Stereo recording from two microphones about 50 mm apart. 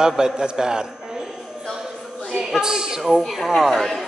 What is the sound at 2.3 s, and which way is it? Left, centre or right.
A man's voice, centre.